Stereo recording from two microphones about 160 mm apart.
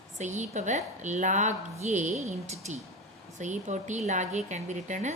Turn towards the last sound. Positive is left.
turn(degrees=-50)  # may be behind; listen again after turning